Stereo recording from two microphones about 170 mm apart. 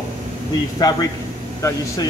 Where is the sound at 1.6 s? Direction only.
20° left (ahead or behind).